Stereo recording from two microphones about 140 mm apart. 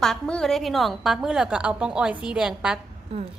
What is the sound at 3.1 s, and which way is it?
Speech, 45° right (ahead or behind).